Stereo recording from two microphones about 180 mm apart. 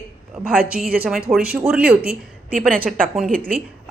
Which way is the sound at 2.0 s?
55° right (ahead or behind).